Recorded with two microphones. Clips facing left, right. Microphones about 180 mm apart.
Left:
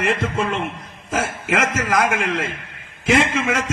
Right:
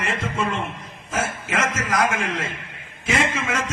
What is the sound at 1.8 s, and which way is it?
A man's voice, 55° left (ahead or behind).